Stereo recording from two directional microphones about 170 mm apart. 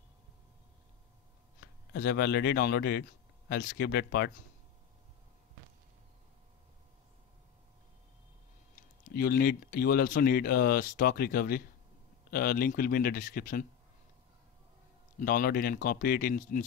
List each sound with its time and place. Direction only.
1.6 s speech: 70° left (ahead or behind)
8.7 s speech: 60° left (ahead or behind)
15.1 s speech: 55° left (ahead or behind)